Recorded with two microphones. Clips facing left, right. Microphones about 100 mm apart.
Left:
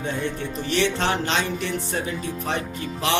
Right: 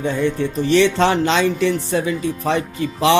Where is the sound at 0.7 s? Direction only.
90° right.